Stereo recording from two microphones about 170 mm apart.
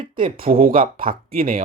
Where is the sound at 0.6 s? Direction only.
55° right (ahead or behind).